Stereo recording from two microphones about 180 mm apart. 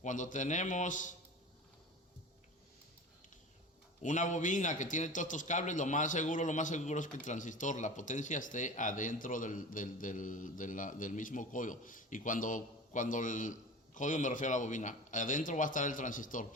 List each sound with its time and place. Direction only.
0.0 s a man's voice: 45° left (ahead or behind)
4.0 s a man's voice: 45° left (ahead or behind)